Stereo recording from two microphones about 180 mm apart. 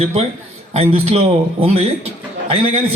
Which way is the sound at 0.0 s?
35° right (ahead or behind).